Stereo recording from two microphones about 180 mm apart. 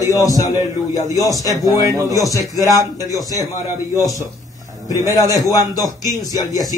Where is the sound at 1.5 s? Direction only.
20° right (ahead or behind).